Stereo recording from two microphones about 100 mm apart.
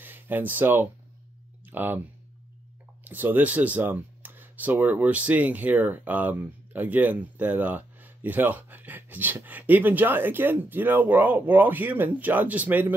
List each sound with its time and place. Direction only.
0.0 s speech: 20° right (ahead or behind)
3.0 s speech: 20° right (ahead or behind)